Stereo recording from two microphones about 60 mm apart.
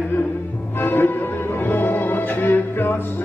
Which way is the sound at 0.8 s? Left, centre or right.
Left.